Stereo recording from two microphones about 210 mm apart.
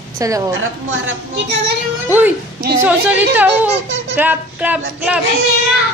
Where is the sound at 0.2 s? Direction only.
15° right (ahead or behind).